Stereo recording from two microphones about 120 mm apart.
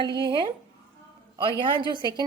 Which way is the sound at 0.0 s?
40° right (ahead or behind).